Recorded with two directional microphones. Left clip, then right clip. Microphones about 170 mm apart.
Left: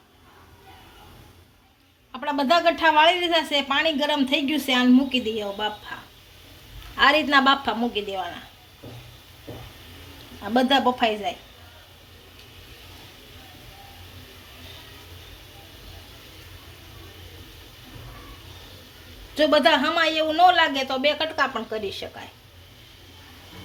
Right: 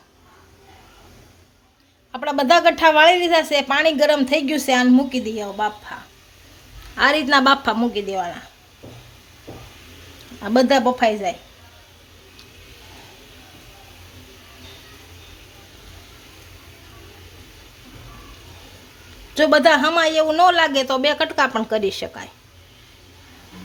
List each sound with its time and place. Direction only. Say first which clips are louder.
2.1 s a woman's voice: right 5 dB; 55° right (ahead or behind)
6.9 s a woman's voice: right 2 dB; 40° right (ahead or behind)
10.4 s a woman's voice: right 4 dB; 50° right (ahead or behind)
19.3 s a woman's voice: right 4 dB; 50° right (ahead or behind)